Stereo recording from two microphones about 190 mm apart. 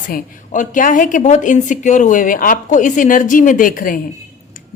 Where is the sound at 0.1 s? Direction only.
40° left (ahead or behind).